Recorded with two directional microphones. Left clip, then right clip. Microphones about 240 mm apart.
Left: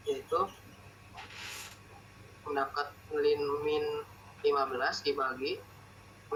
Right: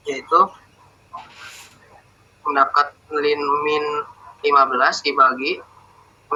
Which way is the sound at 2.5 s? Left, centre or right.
Right.